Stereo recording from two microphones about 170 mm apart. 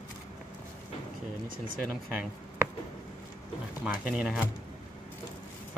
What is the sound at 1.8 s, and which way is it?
Speech, 5° right (ahead or behind).